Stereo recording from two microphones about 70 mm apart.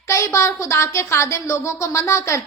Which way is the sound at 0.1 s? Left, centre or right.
Left.